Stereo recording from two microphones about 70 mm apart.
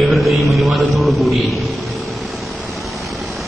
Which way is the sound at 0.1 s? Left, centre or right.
Centre.